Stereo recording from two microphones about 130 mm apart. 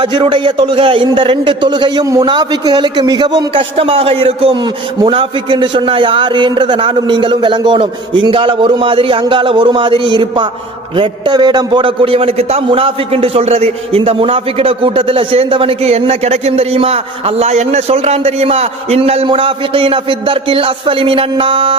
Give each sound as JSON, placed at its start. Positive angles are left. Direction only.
{"t": 0.0, "sound": "a man's voice", "side_deg": -40}